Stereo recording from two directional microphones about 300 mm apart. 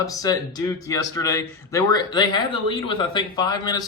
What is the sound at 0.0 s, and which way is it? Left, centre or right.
Speech, centre.